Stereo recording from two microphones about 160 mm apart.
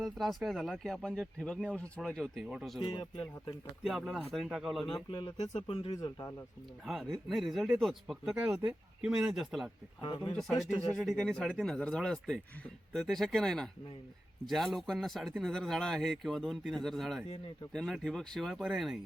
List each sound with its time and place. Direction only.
0.0 s speech: centre (ahead or behind)
2.8 s speech: 30° left (ahead or behind)
3.8 s speech: centre (ahead or behind)
4.9 s speech: 25° left (ahead or behind)
6.0 s speech: 20° left (ahead or behind)
6.8 s speech: centre (ahead or behind)
10.0 s speech: 30° left (ahead or behind)
10.3 s speech: centre (ahead or behind)